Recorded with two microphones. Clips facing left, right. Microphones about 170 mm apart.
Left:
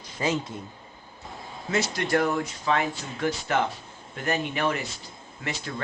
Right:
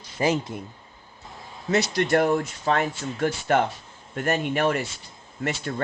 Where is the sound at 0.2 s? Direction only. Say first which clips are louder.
Right 4 dB; 30° right (ahead or behind).